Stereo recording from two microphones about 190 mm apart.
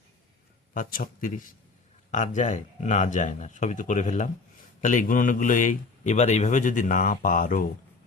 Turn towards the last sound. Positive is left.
turn(degrees=45)  # may be behind; listen again after turning